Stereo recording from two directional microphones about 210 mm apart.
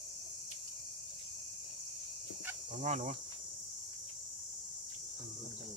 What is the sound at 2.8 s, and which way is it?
Speech, 35° right (ahead or behind).